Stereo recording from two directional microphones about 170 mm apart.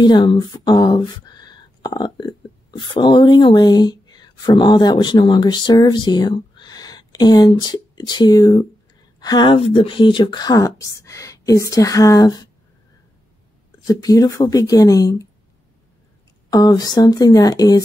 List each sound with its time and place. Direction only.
0.0 s speech: 25° left (ahead or behind)
13.8 s speech: 20° left (ahead or behind)
16.4 s speech: 25° left (ahead or behind)